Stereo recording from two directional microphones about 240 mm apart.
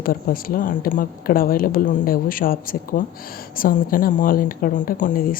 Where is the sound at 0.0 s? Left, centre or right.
Left.